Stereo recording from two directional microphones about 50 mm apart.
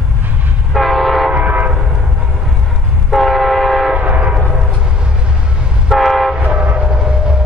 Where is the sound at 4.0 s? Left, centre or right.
Right.